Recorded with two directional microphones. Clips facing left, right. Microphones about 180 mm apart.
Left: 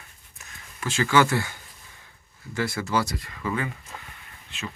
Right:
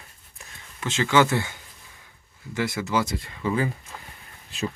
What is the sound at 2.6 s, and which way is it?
Speech, 20° right (ahead or behind).